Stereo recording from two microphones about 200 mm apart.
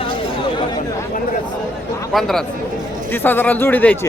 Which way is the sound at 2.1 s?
Centre (ahead or behind).